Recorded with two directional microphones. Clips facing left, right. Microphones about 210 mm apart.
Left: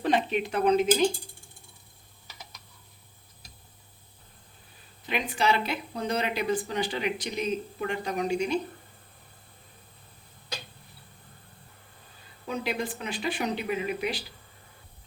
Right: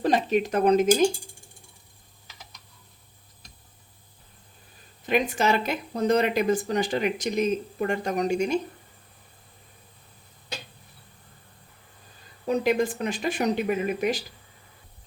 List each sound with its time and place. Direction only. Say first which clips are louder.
0.0 s speech: right 3 dB; 40° right (ahead or behind)
5.0 s speech: right 4 dB; 45° right (ahead or behind)
12.5 s speech: right 8 dB; 45° right (ahead or behind)